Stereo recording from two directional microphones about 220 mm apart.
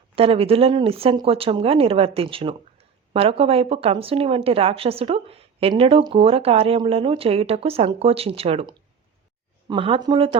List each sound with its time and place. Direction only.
0.2 s speech: 25° right (ahead or behind)